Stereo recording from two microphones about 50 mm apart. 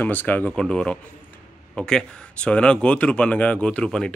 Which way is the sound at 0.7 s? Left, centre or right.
Centre.